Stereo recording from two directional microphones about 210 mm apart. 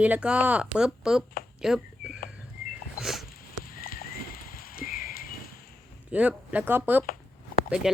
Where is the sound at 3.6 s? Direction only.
45° left (ahead or behind).